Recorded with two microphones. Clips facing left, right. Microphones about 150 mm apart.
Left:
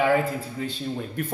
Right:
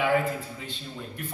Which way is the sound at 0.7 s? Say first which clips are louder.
Left 8 dB; 50° left (ahead or behind).